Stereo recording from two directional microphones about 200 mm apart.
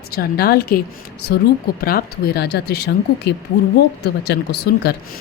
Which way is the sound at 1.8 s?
50° left (ahead or behind).